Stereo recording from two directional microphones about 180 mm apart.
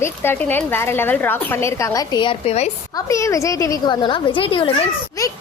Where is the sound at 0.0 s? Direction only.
10° left (ahead or behind); by 4.7 s 30° left (ahead or behind).